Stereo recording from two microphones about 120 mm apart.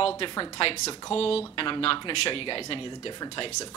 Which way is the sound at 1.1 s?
55° left (ahead or behind).